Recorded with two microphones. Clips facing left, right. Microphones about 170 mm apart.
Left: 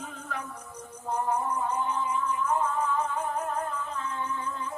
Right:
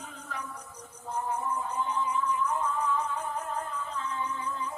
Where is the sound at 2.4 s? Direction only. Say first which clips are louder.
Left 2 dB; 50° left (ahead or behind).